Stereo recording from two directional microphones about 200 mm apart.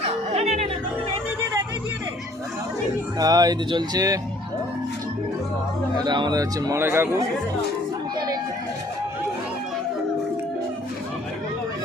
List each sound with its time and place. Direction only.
0.0 s music: 30° right (ahead or behind)
3.2 s speech: 20° right (ahead or behind)
6.1 s speech: 20° right (ahead or behind)